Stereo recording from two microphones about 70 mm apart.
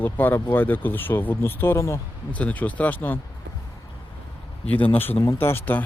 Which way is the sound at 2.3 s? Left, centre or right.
Left.